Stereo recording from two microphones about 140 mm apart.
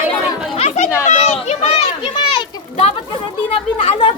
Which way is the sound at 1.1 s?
55° left (ahead or behind).